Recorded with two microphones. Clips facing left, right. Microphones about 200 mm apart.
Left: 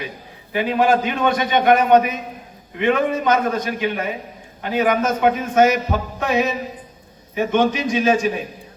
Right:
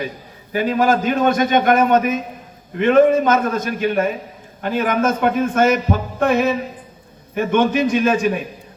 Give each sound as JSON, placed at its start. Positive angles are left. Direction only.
{"t": 0.5, "sound": "a man's voice", "side_deg": -45}